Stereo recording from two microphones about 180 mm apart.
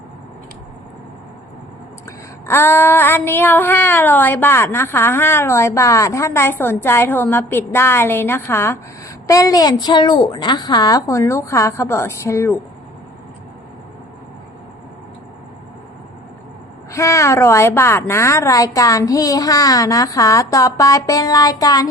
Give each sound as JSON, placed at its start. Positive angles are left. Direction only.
{"t": 2.0, "sound": "child singing", "side_deg": 15}
{"t": 16.9, "sound": "a woman's voice", "side_deg": 15}